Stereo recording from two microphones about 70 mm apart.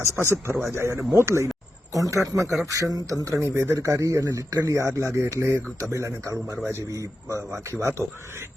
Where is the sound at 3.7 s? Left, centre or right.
Right.